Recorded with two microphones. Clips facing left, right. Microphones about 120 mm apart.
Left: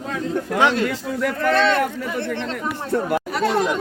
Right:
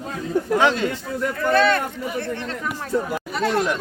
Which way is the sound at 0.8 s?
85° left.